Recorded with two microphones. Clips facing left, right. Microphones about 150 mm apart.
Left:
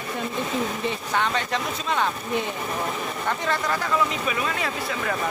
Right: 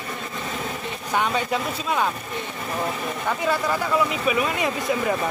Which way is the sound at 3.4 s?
10° right (ahead or behind).